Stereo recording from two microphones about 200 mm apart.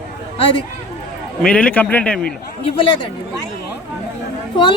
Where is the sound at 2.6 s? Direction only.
25° left (ahead or behind).